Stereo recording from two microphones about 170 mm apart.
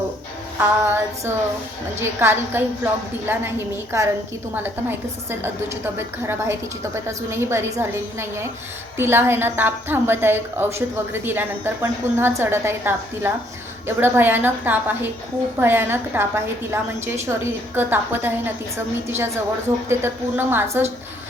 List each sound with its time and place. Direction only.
0.6 s a woman's voice: 15° right (ahead or behind)
4.5 s a woman's voice: 10° right (ahead or behind)